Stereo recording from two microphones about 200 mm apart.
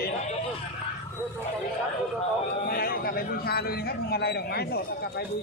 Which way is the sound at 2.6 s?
50° left (ahead or behind).